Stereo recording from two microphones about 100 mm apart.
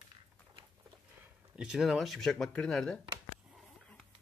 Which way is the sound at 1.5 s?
5° right (ahead or behind).